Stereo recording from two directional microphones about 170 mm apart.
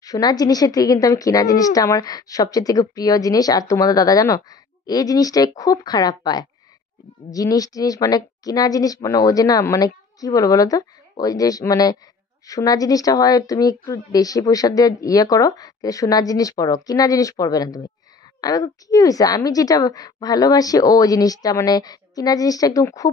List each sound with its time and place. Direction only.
0.0 s a woman's voice: 20° left (ahead or behind)